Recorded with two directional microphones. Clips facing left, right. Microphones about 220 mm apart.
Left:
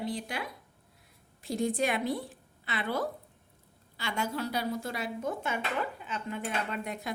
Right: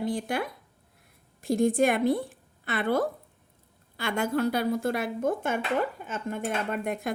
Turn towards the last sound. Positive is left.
turn(degrees=-50)  # may be behind; listen again after turning